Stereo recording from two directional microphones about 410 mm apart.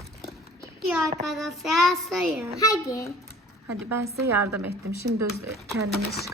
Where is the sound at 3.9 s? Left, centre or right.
Right.